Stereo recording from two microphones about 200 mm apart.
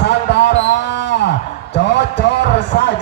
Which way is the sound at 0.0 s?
60° left (ahead or behind).